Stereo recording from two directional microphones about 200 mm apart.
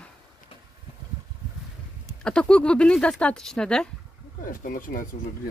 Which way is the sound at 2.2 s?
5° left (ahead or behind).